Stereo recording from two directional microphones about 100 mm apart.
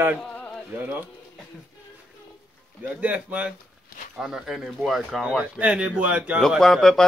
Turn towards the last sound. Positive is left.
turn(degrees=5)  # may be behind; listen again after turning